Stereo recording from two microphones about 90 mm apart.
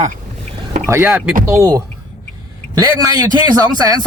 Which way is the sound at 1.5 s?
35° right (ahead or behind).